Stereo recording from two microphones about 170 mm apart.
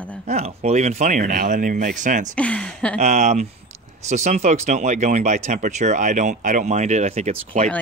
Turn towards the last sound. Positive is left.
turn(degrees=-45)  # may be behind; listen again after turning